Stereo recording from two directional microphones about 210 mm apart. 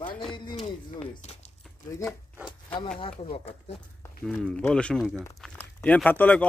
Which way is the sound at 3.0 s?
25° left (ahead or behind).